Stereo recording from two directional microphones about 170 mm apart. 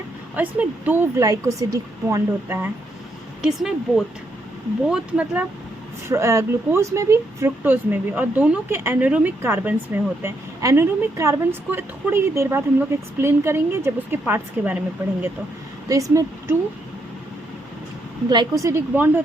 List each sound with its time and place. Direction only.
0.3 s speech: 10° right (ahead or behind)
3.4 s a woman's voice: centre (ahead or behind)
15.9 s speech: 20° right (ahead or behind)
18.3 s speech: 25° right (ahead or behind)